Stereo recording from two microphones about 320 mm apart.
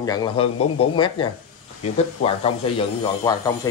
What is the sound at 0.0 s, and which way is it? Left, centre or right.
Speech, centre.